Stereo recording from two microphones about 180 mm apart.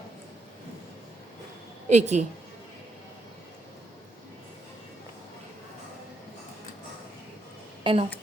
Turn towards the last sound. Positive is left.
turn(degrees=-30)  # may be behind; listen again after turning